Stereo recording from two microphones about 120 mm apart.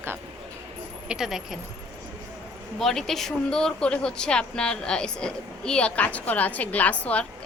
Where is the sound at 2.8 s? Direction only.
Centre (ahead or behind).